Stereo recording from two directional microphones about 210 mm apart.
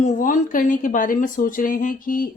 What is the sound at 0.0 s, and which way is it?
Speech, 40° left (ahead or behind).